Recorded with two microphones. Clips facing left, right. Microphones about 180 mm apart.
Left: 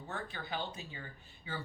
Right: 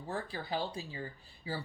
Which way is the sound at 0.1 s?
35° right (ahead or behind).